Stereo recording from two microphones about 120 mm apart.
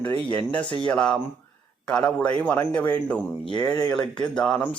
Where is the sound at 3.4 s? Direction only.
40° left (ahead or behind).